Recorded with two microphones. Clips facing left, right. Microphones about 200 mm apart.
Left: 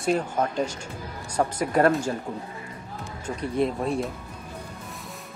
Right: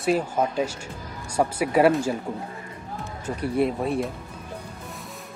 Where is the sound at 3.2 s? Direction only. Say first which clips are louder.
Right 2 dB; 10° right (ahead or behind).